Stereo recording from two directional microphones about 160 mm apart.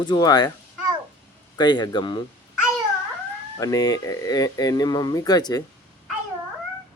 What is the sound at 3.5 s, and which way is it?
Speech, 20° left (ahead or behind).